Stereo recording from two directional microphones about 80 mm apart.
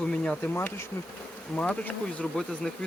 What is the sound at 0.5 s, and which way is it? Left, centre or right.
Bee, left.